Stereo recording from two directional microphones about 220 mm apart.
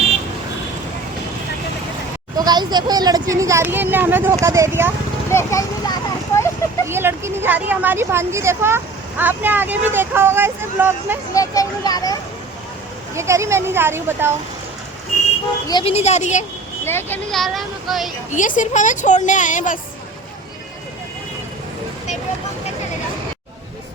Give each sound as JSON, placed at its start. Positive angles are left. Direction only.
{"t": 2.4, "sound": "speech", "side_deg": -20}
{"t": 5.3, "sound": "a sound", "side_deg": 10}
{"t": 6.8, "sound": "speech", "side_deg": -10}
{"t": 11.3, "sound": "speech", "side_deg": 15}
{"t": 13.1, "sound": "speech", "side_deg": -15}
{"t": 15.7, "sound": "a woman's voice", "side_deg": 25}
{"t": 16.8, "sound": "speech", "side_deg": 10}
{"t": 18.3, "sound": "a woman's voice", "side_deg": 35}